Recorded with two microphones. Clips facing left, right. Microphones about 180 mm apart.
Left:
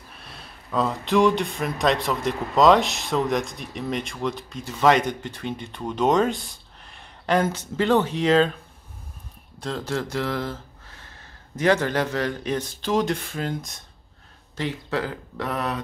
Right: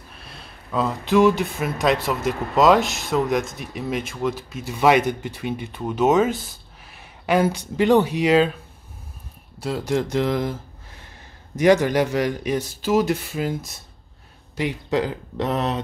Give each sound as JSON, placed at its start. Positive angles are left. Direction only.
{"t": 0.1, "sound": "speech", "side_deg": 0}
{"t": 9.6, "sound": "speech", "side_deg": -10}